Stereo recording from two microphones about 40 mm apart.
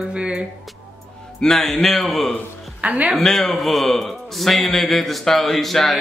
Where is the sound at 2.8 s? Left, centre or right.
Right.